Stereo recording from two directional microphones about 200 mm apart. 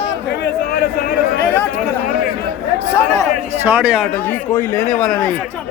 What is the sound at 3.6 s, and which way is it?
Speech, 5° right (ahead or behind).